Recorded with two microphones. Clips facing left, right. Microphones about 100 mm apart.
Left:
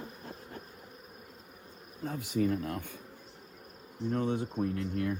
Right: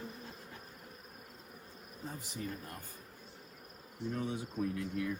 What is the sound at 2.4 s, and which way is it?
Speech, 90° left.